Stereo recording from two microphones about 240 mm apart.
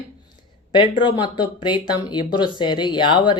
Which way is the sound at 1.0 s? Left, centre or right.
Centre.